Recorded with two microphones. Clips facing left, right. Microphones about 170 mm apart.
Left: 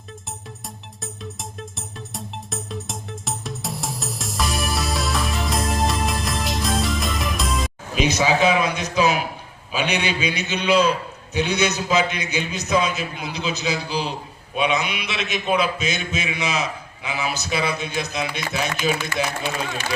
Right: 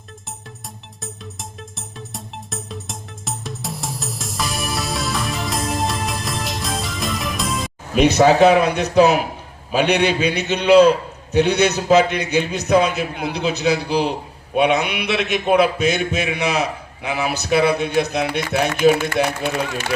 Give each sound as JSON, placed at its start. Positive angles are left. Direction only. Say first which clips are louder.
{"t": 1.0, "sound": "music", "louder": "left 1 dB", "side_deg": 0}
{"t": 7.9, "sound": "a man's voice", "louder": "right 7 dB", "side_deg": -65}